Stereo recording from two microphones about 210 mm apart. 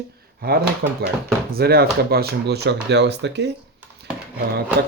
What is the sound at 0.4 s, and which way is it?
A man's voice, 45° right (ahead or behind).